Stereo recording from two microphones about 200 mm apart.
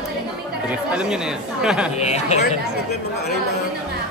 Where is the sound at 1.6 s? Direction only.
5° right (ahead or behind).